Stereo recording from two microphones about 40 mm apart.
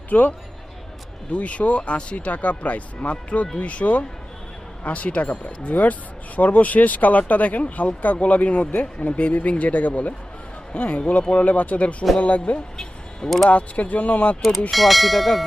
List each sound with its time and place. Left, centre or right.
0.1 s speech: left
1.3 s speech: left
12.7 s music: centre
13.5 s speech: left
14.7 s speech: centre